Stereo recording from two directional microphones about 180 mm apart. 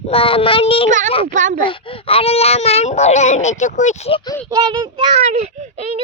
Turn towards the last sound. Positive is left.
turn(degrees=-40)  # may be behind; listen again after turning